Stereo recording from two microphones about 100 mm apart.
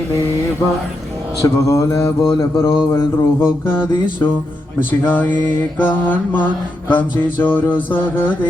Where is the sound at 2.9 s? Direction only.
25° left (ahead or behind).